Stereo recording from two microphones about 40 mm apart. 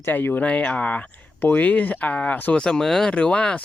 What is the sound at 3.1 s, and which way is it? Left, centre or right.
Speech, left.